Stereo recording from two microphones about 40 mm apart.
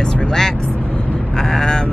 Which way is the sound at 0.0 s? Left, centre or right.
Centre.